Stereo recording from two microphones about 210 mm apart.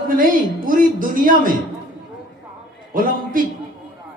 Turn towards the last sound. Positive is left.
turn(degrees=-40)  # may be behind; listen again after turning